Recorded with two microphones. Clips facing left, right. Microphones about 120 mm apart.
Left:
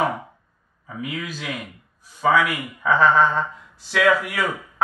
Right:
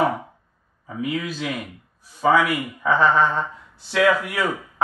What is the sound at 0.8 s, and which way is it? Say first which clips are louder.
Speech: right 4 dB; 30° right (ahead or behind).